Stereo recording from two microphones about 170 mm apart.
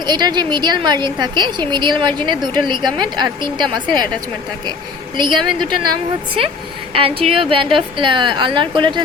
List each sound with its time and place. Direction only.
0.0 s a woman's voice: 25° right (ahead or behind)
5.1 s a woman's voice: 25° right (ahead or behind)